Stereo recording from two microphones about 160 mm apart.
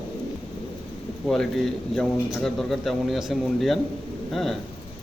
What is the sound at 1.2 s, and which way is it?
Speech, 5° left (ahead or behind).